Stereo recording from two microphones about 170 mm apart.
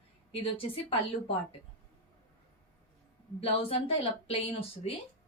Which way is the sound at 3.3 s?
35° left (ahead or behind).